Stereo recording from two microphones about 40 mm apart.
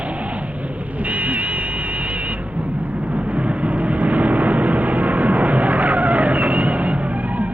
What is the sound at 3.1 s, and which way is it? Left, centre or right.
Vehicle, right.